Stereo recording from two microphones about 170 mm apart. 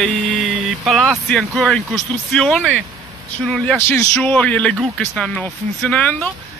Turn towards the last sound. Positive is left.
turn(degrees=5)  # may be behind; listen again after turning